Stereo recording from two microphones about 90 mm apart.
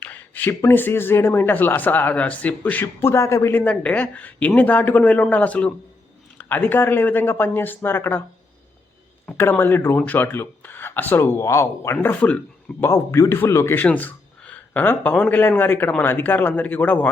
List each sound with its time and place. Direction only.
0.0 s speech: 20° left (ahead or behind)
3.5 s speech: 15° left (ahead or behind)
9.2 s speech: 25° left (ahead or behind)
12.0 s speech: 15° left (ahead or behind)
12.8 s speech: 30° left (ahead or behind)
13.7 s a sound: 15° left (ahead or behind)
15.3 s speech: 20° left (ahead or behind)